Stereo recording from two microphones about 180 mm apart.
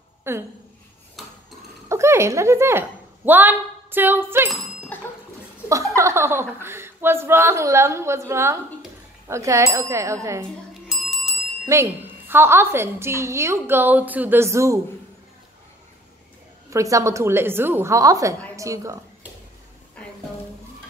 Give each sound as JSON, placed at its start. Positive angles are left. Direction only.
{"t": 0.3, "sound": "a woman's voice", "side_deg": -15}
{"t": 1.9, "sound": "speech", "side_deg": -15}
{"t": 3.3, "sound": "a sound", "side_deg": -10}
{"t": 4.5, "sound": "a sound", "side_deg": 10}
{"t": 5.7, "sound": "a woman's voice", "side_deg": -15}
{"t": 10.7, "sound": "bicycle bell", "side_deg": 0}
{"t": 11.6, "sound": "a woman's voice", "side_deg": -15}
{"t": 16.7, "sound": "a woman's voice", "side_deg": -15}